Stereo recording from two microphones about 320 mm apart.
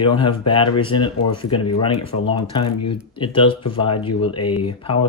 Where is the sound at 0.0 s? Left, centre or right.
Centre.